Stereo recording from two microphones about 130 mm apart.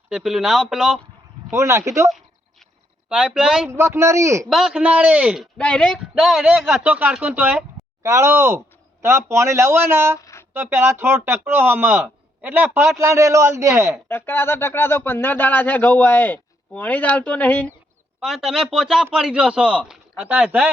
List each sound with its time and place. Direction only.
0.1 s speech: centre (ahead or behind)
1.5 s speech: 20° right (ahead or behind)
2.0 s a sound: centre (ahead or behind)
3.1 s speech: 5° right (ahead or behind)
3.7 s speech: 20° right (ahead or behind)
4.4 s speech: centre (ahead or behind)
5.5 s speech: 10° left (ahead or behind); by 10.2 s 20° right (ahead or behind)
10.2 s a sound: 25° left (ahead or behind)
10.5 s speech: 20° right (ahead or behind)
14.1 s speech: 15° left (ahead or behind)
18.2 s speech: centre (ahead or behind)